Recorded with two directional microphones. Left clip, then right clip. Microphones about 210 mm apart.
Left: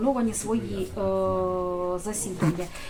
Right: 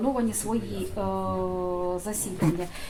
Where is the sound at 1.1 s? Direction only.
20° right (ahead or behind).